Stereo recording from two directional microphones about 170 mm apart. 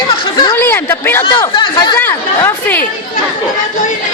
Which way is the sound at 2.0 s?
15° left (ahead or behind).